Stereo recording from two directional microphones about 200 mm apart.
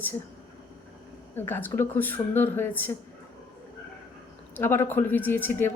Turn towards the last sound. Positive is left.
turn(degrees=10)  # may be behind; listen again after turning